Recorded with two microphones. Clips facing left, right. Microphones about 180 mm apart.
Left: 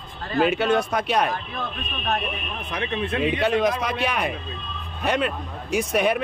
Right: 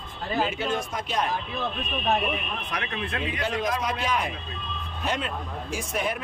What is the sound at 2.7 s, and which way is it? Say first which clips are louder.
Speech: left 7 dB; 25° left (ahead or behind).